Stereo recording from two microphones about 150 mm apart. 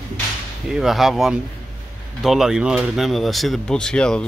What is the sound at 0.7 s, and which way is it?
Speech, centre (ahead or behind).